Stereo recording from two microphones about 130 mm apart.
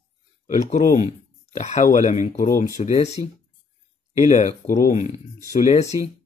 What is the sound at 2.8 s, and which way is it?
Speech, 55° left (ahead or behind).